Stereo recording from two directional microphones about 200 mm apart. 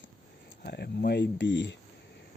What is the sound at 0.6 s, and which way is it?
Speech, 55° left (ahead or behind).